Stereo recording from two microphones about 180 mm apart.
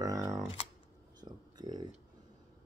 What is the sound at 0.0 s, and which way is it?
Camera, 20° right (ahead or behind).